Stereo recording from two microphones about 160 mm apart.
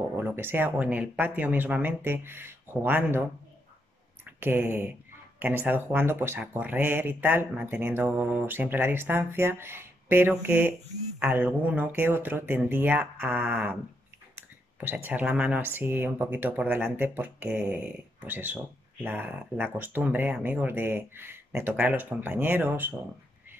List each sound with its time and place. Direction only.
0.2 s speech: 15° right (ahead or behind)
4.4 s speech: 10° right (ahead or behind)